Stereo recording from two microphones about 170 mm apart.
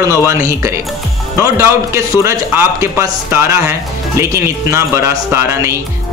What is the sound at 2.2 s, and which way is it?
Speech, 15° right (ahead or behind).